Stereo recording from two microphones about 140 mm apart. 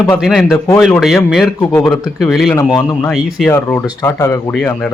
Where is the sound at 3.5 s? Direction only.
20° left (ahead or behind).